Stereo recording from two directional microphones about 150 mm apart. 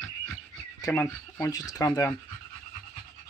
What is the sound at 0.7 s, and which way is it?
Speech, 20° left (ahead or behind).